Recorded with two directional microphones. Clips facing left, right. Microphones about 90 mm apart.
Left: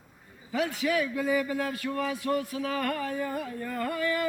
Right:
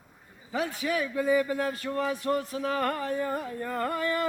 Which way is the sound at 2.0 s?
30° right (ahead or behind).